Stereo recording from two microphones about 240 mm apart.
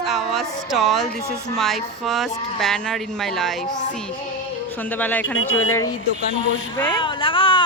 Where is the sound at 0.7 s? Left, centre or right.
Centre.